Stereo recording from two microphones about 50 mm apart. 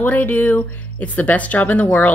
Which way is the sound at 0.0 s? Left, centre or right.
Left.